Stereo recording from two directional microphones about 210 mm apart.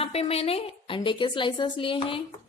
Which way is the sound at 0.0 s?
30° left (ahead or behind).